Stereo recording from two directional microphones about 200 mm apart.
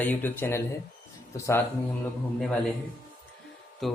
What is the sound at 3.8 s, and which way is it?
Speech, centre (ahead or behind).